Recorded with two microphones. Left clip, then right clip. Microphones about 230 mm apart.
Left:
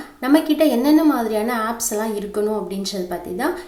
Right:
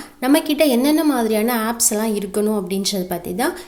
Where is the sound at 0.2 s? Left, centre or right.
Right.